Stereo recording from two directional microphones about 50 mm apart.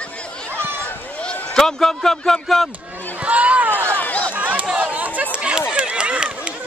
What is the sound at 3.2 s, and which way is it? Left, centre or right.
Speech, right.